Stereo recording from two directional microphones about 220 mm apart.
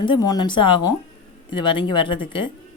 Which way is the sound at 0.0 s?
20° left (ahead or behind).